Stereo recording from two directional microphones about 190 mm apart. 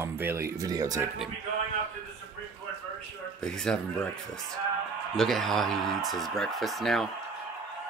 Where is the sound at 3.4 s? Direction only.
5° left (ahead or behind).